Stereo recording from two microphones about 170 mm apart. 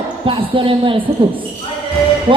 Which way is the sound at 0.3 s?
30° right (ahead or behind).